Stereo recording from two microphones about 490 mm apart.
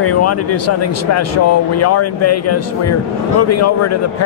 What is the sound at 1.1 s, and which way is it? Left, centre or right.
Speech, left.